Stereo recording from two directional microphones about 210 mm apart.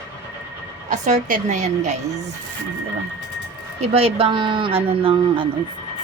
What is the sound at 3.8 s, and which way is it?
Speech, 30° right (ahead or behind).